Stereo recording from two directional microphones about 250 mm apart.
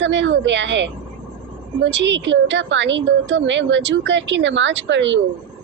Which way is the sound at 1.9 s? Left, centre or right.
Right.